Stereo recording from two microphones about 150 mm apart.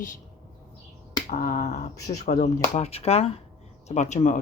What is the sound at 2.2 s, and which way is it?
Speech, 50° left (ahead or behind).